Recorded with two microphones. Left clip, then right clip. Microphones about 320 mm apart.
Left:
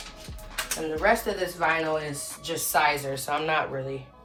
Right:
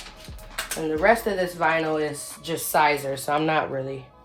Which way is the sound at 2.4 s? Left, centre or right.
Right.